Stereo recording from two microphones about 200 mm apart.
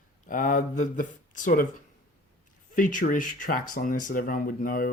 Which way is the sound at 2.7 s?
40° left (ahead or behind).